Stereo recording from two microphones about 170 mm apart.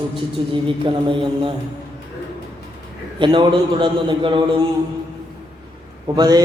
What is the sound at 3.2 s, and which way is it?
A man's voice, 30° right (ahead or behind).